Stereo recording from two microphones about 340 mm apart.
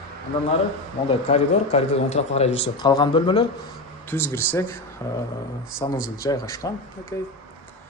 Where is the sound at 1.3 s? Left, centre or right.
Centre.